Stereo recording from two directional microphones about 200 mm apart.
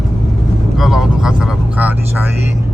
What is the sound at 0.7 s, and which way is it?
Vehicle, centre (ahead or behind).